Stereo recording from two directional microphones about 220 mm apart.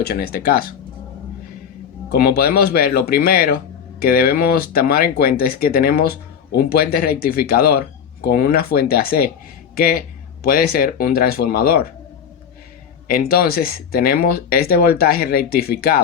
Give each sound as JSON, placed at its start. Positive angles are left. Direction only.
{"t": 0.0, "sound": "speech", "side_deg": 45}
{"t": 2.0, "sound": "speech", "side_deg": 45}
{"t": 13.1, "sound": "speech", "side_deg": 45}